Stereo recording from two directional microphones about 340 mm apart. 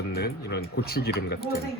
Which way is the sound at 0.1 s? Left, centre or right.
Left.